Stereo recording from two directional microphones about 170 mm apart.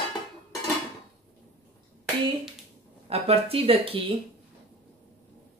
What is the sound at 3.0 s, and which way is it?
Speech, 35° right (ahead or behind).